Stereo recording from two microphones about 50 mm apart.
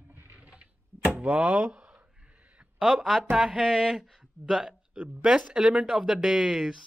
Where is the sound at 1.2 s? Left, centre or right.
Right.